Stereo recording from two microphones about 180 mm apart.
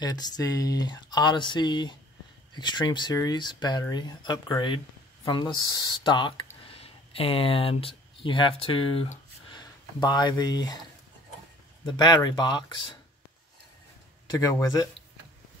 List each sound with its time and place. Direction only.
0.0 s speech: 20° left (ahead or behind)
11.8 s speech: 25° left (ahead or behind)
14.3 s speech: 20° left (ahead or behind)